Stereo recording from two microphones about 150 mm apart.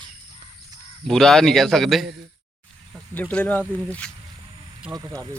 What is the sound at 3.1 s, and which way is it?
Speech, 10° left (ahead or behind).